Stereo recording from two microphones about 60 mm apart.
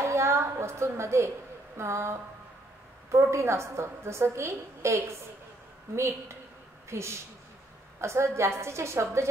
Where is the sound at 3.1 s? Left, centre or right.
Right.